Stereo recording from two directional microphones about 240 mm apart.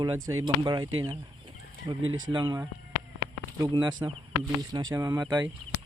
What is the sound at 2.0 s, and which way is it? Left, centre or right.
Speech, right.